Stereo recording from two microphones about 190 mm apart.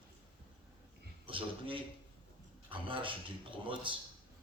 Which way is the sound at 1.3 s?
25° right (ahead or behind).